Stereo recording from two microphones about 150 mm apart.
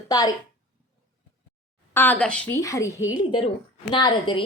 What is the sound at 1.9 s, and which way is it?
Speech, 10° left (ahead or behind).